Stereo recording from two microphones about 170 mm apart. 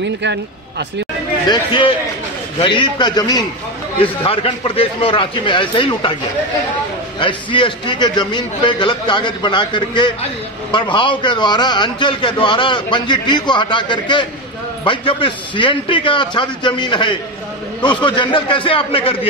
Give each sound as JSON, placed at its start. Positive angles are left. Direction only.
{"t": 0.0, "sound": "speech", "side_deg": -90}
{"t": 1.5, "sound": "a man's voice", "side_deg": 30}
{"t": 7.2, "sound": "a man's voice", "side_deg": 30}